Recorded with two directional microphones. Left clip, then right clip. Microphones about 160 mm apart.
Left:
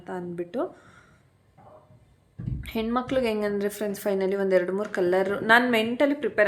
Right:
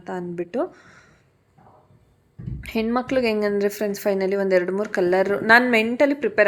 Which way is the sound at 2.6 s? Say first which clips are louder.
Right 4 dB; 30° right (ahead or behind).